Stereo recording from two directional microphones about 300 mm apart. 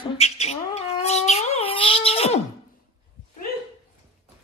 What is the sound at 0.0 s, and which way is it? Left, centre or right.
Cat, left.